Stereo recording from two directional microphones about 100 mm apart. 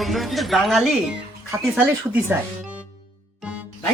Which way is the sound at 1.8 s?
15° right (ahead or behind).